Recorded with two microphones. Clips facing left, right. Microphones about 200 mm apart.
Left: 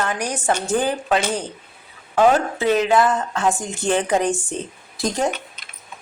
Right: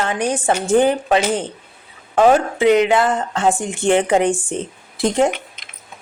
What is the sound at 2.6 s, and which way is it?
Speech, 20° right (ahead or behind).